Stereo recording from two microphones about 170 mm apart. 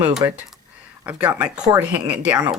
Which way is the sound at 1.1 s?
10° right (ahead or behind).